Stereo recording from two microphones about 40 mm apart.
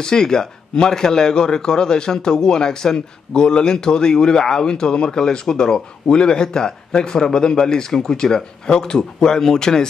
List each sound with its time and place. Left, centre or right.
0.0 s a man's voice: centre